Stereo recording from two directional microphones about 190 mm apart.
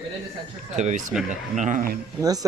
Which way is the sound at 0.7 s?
40° right (ahead or behind).